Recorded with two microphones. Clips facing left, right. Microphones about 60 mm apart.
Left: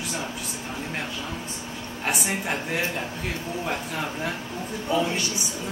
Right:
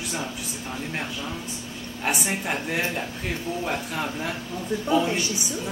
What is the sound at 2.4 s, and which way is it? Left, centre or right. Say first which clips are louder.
A woman's voice: right 2 dB; centre.